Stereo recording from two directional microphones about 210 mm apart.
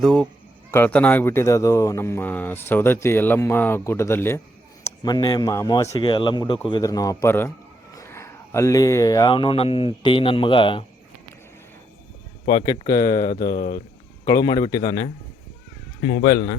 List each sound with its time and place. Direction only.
0.0 s speech: 5° left (ahead or behind); by 10.8 s 25° left (ahead or behind)
12.5 s speech: 25° left (ahead or behind)
13.2 s speech: 45° left (ahead or behind)
14.3 s speech: 20° left (ahead or behind)
16.2 s speech: 45° left (ahead or behind)